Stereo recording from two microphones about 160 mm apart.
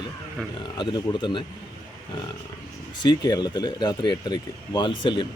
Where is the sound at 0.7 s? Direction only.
30° left (ahead or behind).